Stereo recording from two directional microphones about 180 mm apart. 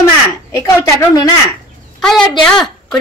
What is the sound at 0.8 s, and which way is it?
Speech, 20° left (ahead or behind).